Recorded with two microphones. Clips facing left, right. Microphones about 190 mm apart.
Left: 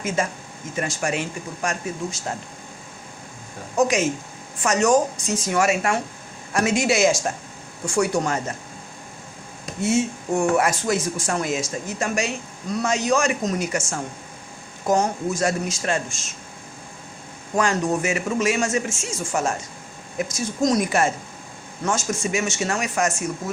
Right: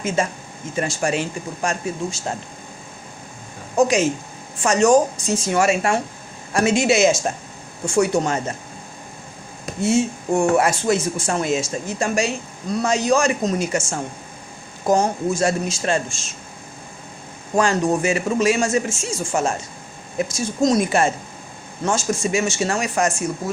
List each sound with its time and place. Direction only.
0.2 s speech: 25° right (ahead or behind)
3.8 s speech: 30° right (ahead or behind)
9.8 s speech: 30° right (ahead or behind)
17.5 s speech: 30° right (ahead or behind)